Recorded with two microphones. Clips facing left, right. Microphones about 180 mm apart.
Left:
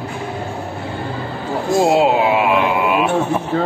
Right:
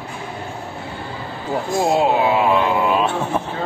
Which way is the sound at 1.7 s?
20° left (ahead or behind).